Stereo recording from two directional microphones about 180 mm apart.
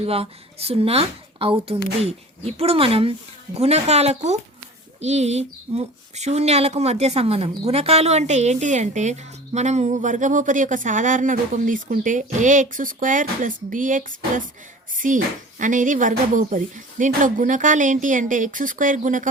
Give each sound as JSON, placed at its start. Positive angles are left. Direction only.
{"t": 0.0, "sound": "a woman's voice", "side_deg": -35}